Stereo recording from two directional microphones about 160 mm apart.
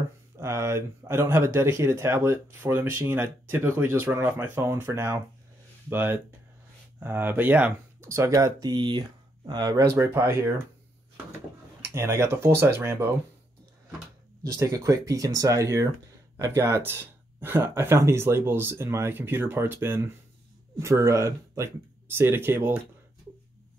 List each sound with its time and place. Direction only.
0.4 s speech: 20° right (ahead or behind)
11.8 s speech: 15° right (ahead or behind)
14.4 s speech: 20° right (ahead or behind)